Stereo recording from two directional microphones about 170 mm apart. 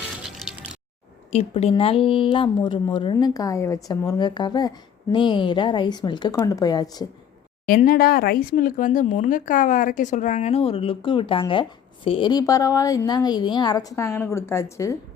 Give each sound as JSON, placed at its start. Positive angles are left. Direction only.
{"t": 0.3, "sound": "music", "side_deg": -5}
{"t": 1.3, "sound": "a woman's voice", "side_deg": 40}
{"t": 7.7, "sound": "a woman's voice", "side_deg": 55}